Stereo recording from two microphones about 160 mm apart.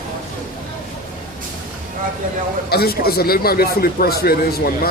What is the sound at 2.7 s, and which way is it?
A man's voice, 75° left (ahead or behind).